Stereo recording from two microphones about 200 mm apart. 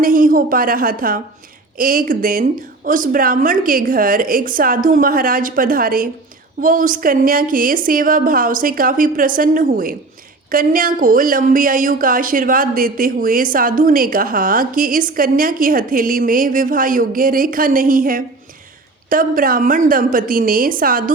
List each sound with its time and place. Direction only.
0.0 s a woman's voice: 45° right (ahead or behind)